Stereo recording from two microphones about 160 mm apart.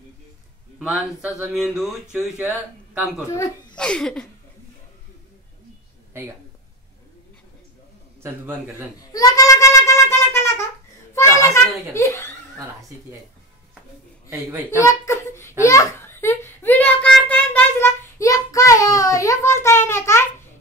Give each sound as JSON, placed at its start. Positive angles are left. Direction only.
{"t": 0.7, "sound": "speech", "side_deg": -5}
{"t": 3.3, "sound": "speech", "side_deg": 20}
{"t": 3.7, "sound": "speech", "side_deg": 5}
{"t": 6.1, "sound": "speech", "side_deg": -15}
{"t": 8.2, "sound": "a man's voice", "side_deg": -15}
{"t": 9.0, "sound": "a sound", "side_deg": 20}
{"t": 14.3, "sound": "a man's voice", "side_deg": -15}
{"t": 14.8, "sound": "a sound", "side_deg": 20}